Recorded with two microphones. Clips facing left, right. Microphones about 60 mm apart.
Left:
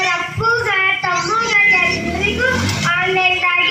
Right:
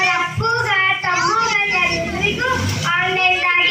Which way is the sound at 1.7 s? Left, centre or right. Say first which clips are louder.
Left 3 dB; left.